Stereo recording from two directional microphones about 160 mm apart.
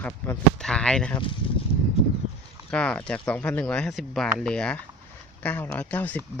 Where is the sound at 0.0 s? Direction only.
5° left (ahead or behind).